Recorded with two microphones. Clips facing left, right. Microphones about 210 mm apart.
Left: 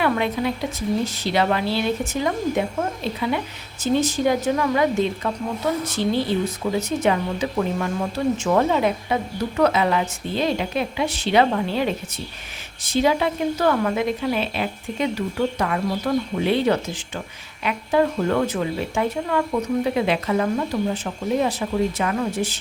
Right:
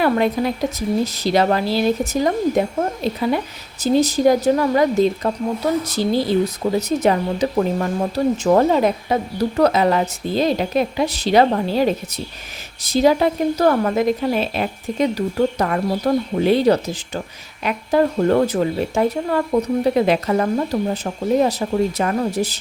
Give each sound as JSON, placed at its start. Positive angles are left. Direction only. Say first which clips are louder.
{"t": 0.0, "sound": "speech", "louder": "right 4 dB", "side_deg": -40}